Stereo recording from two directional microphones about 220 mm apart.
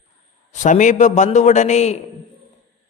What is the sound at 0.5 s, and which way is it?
A man's voice, 35° left (ahead or behind).